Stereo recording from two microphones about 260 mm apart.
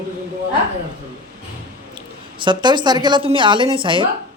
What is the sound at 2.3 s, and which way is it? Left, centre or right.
A man's voice, centre.